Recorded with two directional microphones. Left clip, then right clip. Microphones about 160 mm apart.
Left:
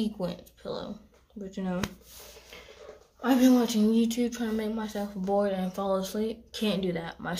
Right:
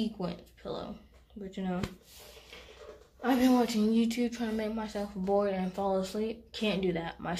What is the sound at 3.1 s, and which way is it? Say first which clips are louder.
A woman's voice: left 3 dB; 15° left (ahead or behind).